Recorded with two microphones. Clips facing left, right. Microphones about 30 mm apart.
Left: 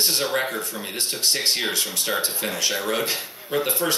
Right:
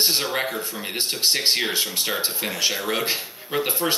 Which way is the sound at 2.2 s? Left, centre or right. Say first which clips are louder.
Right 1 dB; right.